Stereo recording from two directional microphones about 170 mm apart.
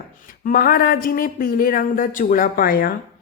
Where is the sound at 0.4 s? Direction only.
55° left (ahead or behind).